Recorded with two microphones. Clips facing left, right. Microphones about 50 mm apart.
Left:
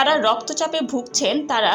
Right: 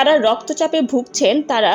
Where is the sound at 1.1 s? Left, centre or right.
Right.